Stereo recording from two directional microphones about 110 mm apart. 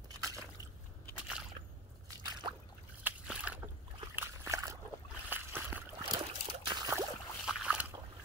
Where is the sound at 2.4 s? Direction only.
45° right (ahead or behind).